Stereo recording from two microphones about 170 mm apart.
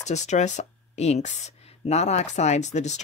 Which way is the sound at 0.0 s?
45° left (ahead or behind).